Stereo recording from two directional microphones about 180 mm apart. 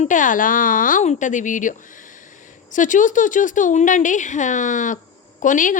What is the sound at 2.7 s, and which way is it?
Speech, 45° left (ahead or behind).